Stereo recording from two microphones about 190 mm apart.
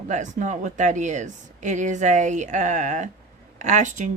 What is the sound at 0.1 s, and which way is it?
Speech, 40° right (ahead or behind).